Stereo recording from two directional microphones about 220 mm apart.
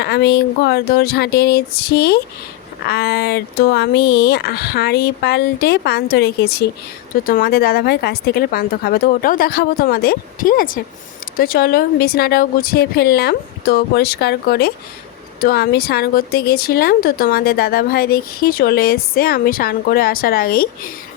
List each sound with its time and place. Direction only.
0.0 s speech: 50° left (ahead or behind)